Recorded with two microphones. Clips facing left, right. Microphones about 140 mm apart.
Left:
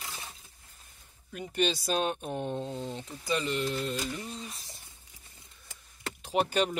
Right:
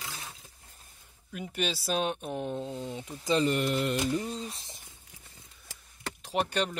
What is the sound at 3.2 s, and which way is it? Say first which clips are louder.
Speech: right 4 dB; 30° right (ahead or behind).